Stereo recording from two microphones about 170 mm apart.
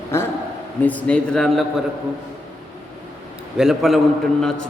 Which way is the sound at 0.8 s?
10° left (ahead or behind).